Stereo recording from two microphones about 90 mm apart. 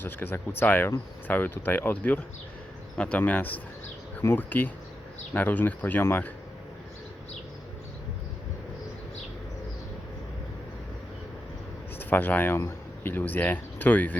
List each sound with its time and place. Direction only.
0.0 s speech: 20° left (ahead or behind)
11.9 s speech: 20° left (ahead or behind)